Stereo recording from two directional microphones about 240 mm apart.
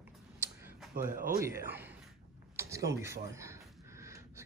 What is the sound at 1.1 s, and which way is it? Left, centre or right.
Speech, right.